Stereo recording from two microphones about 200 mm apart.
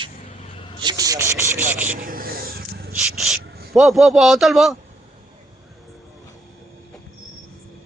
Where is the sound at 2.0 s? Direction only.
45° right (ahead or behind).